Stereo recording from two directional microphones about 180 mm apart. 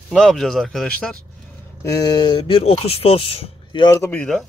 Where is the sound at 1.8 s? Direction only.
20° left (ahead or behind).